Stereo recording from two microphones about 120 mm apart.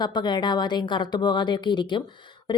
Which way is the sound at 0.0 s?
40° left (ahead or behind).